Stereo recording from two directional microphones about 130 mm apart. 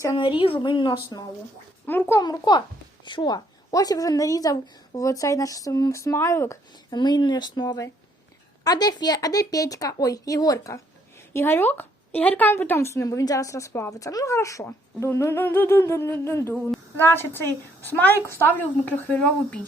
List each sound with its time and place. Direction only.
0.2 s a woman's voice: 40° left (ahead or behind)
1.9 s a woman's voice: 15° left (ahead or behind)
2.2 s a woman's voice: 35° left (ahead or behind)
6.9 s a woman's voice: 35° left (ahead or behind)
11.3 s a woman's voice: 15° left (ahead or behind)